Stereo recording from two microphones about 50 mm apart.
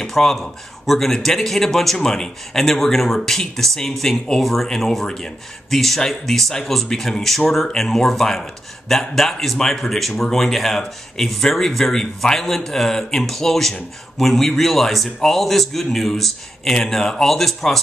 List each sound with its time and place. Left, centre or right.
0.0 s speech: centre